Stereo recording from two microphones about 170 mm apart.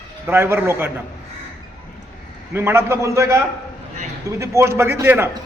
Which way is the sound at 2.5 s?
15° right (ahead or behind).